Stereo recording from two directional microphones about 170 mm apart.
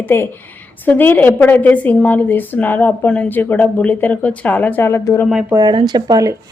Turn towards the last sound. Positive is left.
turn(degrees=-20)  # may be behind; listen again after turning